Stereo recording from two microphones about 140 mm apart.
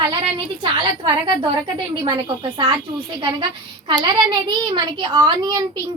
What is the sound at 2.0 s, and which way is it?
A woman's voice, 30° right (ahead or behind).